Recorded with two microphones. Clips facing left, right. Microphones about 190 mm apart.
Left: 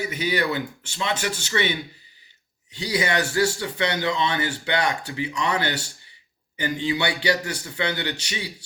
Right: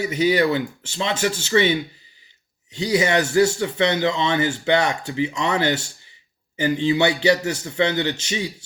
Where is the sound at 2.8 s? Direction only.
25° right (ahead or behind).